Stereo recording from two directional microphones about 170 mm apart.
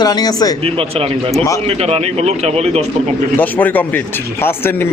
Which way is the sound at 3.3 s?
10° left (ahead or behind).